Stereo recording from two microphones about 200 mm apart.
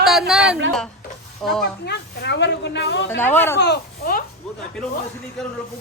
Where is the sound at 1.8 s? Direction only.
60° left (ahead or behind).